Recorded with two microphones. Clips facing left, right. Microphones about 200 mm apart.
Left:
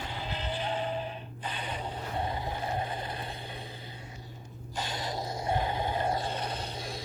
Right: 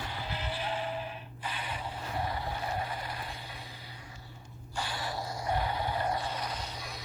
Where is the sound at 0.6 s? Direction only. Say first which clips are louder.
Left 3 dB; 25° left (ahead or behind).